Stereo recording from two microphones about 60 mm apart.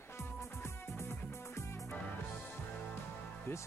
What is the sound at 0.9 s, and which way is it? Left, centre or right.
Music, left.